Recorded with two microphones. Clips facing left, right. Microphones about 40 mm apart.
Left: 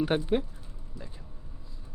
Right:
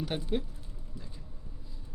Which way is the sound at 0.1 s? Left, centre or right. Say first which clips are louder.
Left 7 dB; left.